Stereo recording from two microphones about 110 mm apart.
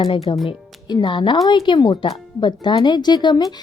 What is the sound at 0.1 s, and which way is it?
Speech, 55° left (ahead or behind).